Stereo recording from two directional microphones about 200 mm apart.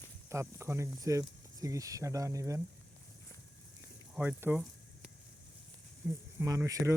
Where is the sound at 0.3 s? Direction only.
15° right (ahead or behind).